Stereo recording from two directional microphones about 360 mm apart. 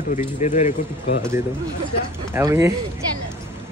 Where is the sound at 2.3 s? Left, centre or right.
Centre.